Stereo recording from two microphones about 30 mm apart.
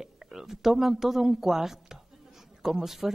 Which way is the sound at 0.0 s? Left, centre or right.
Centre.